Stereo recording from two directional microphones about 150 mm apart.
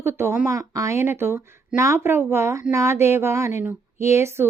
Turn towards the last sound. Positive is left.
turn(degrees=-15)  # may be behind; listen again after turning